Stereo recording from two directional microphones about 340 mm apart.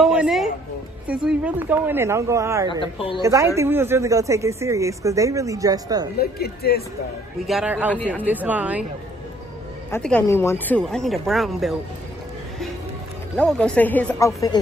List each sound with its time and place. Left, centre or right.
0.0 s a sound: centre
1.0 s a man's voice: centre
2.7 s a woman's voice: centre
3.2 s a man's voice: centre
6.1 s speech: left
7.4 s speech: centre
9.8 s speech: centre
13.4 s speech: centre